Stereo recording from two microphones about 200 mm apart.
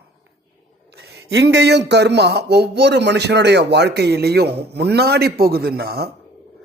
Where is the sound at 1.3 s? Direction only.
65° right (ahead or behind).